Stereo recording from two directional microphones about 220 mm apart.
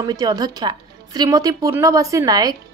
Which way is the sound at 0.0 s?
15° right (ahead or behind).